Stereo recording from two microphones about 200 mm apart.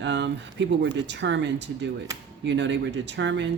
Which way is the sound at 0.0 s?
60° right (ahead or behind).